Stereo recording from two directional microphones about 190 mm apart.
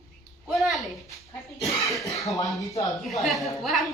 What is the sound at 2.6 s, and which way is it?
Speech, 15° left (ahead or behind).